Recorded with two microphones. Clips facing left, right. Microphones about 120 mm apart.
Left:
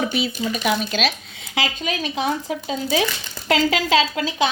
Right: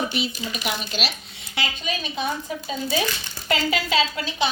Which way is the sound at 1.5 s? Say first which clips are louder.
Left 4 dB; 90° left.